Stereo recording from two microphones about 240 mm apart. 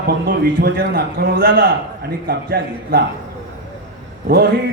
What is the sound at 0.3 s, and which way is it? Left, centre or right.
A man's voice, right.